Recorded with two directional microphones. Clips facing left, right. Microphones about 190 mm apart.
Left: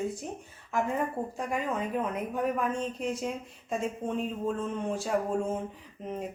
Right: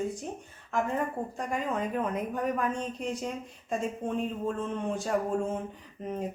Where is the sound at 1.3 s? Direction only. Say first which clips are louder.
Right 1 dB; 5° left (ahead or behind).